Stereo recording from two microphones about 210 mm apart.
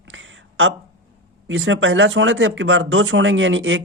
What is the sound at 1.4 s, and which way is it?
Speech, 65° right (ahead or behind).